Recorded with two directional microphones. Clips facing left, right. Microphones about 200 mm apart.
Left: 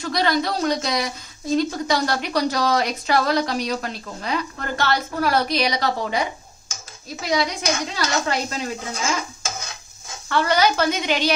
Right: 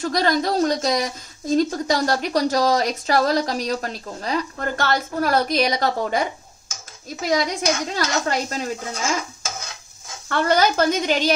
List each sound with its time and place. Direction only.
0.0 s a woman's voice: 45° right (ahead or behind)
10.2 s a woman's voice: 50° right (ahead or behind)